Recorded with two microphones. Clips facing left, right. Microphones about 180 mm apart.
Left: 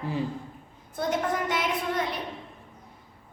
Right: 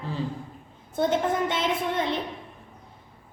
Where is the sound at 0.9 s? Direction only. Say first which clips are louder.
Right 4 dB; 25° right (ahead or behind).